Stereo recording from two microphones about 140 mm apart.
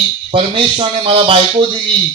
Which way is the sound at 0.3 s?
40° right (ahead or behind).